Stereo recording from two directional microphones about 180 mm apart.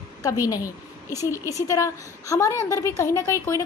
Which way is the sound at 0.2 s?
20° left (ahead or behind).